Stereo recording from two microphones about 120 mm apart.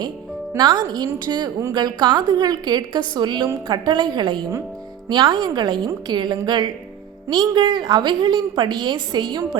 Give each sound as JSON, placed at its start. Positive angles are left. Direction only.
{"t": 0.5, "sound": "a woman's voice", "side_deg": -30}